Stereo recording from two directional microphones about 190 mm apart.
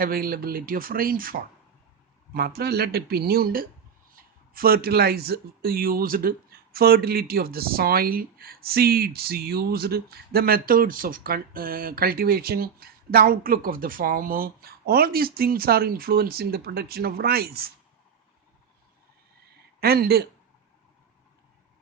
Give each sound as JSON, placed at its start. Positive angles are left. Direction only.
{"t": 0.0, "sound": "speech", "side_deg": -50}
{"t": 19.8, "sound": "speech", "side_deg": -55}